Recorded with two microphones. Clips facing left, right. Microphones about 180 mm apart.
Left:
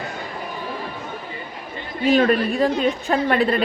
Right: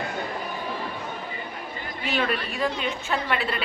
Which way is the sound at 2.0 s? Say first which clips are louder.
Left 11 dB; 45° left (ahead or behind).